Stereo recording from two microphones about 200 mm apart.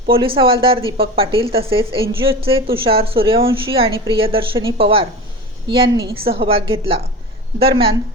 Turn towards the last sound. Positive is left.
turn(degrees=-25)  # may be behind; listen again after turning